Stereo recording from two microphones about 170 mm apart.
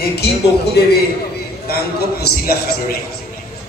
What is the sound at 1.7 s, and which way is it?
A man's voice, 65° left (ahead or behind).